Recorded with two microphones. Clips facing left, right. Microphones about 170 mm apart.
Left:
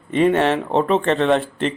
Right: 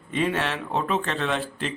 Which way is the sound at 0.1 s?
60° left (ahead or behind).